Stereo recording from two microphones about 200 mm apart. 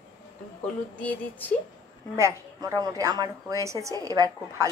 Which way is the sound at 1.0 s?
10° left (ahead or behind).